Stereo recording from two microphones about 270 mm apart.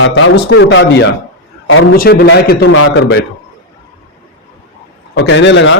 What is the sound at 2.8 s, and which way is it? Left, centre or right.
Speech, left.